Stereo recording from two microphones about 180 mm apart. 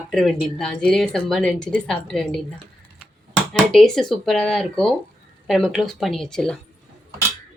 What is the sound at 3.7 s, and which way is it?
Speech, centre (ahead or behind).